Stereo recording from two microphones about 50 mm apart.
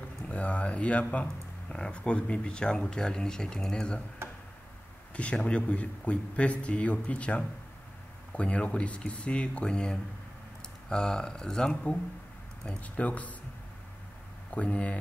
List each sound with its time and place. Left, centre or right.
0.3 s a sound: left
1.7 s speech: left
4.2 s a sound: right
5.1 s speech: left
11.7 s speech: left
14.5 s speech: left